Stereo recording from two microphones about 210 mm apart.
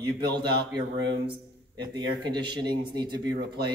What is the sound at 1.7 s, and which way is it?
A man's voice, 20° right (ahead or behind).